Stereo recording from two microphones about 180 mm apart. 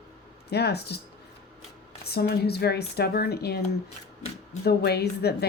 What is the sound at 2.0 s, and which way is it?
Speech, 60° left (ahead or behind).